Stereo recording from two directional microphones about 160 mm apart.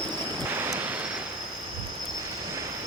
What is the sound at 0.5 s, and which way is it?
Vehicle, 15° right (ahead or behind).